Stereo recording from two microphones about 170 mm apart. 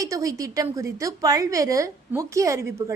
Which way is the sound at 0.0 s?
20° right (ahead or behind).